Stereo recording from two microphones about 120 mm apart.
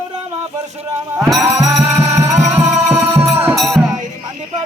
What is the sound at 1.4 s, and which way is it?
Music, 20° right (ahead or behind).